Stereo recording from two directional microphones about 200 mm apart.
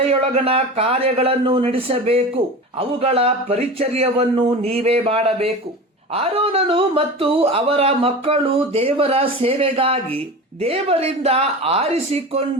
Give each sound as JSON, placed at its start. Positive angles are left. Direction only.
{"t": 0.0, "sound": "speech", "side_deg": -30}